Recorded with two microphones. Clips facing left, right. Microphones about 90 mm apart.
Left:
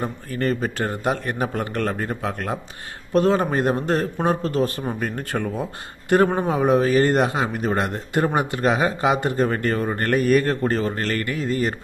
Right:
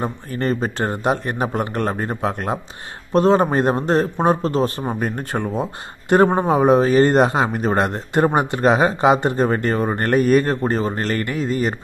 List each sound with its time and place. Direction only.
0.0 s a man's voice: 30° right (ahead or behind)